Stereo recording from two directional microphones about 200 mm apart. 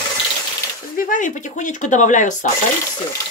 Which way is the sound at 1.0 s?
40° left (ahead or behind).